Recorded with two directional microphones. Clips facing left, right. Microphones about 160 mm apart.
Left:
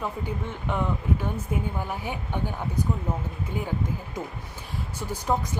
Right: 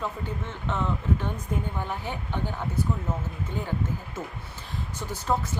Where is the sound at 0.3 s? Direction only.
10° left (ahead or behind).